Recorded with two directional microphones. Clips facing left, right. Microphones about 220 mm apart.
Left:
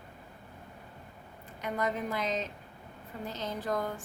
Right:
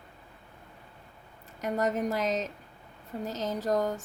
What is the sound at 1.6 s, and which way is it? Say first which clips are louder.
Speech: right 4 dB; 45° right (ahead or behind).